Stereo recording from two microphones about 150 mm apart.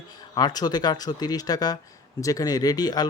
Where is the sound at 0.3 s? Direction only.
25° left (ahead or behind).